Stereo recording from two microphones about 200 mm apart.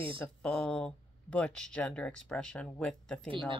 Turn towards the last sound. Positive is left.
turn(degrees=5)  # may be behind; listen again after turning